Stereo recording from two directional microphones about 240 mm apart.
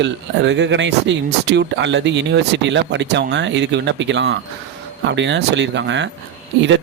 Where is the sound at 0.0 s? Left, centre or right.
Right.